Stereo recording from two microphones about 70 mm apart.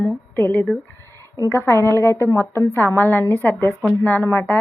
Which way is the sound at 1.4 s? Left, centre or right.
Left.